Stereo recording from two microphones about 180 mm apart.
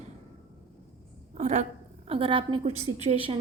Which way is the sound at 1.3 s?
40° right (ahead or behind).